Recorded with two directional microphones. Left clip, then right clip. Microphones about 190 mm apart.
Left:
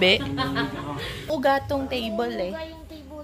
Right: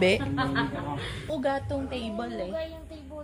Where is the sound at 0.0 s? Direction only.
5° right (ahead or behind).